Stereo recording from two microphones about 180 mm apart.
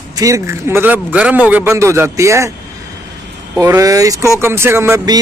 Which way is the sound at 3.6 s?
20° right (ahead or behind).